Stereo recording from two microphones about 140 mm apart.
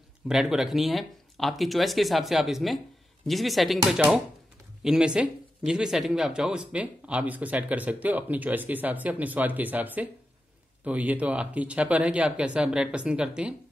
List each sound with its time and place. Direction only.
0.3 s speech: 5° right (ahead or behind)